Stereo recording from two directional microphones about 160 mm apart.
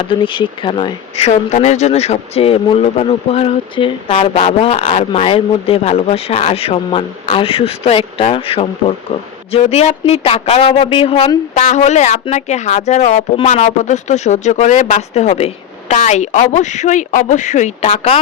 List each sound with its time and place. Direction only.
0.0 s speech: 30° left (ahead or behind)